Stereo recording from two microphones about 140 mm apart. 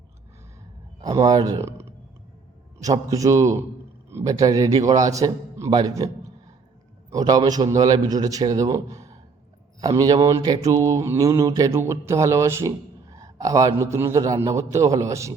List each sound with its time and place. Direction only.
1.0 s mantra: 25° right (ahead or behind)
2.8 s mantra: 25° right (ahead or behind)
7.1 s mantra: 25° right (ahead or behind)